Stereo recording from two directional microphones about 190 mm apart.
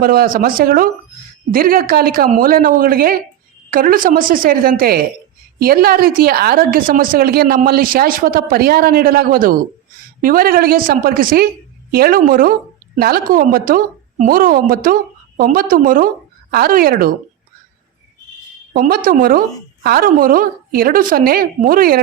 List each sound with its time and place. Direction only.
0.0 s a woman's voice: 50° right (ahead or behind)
18.7 s a woman's voice: 50° right (ahead or behind)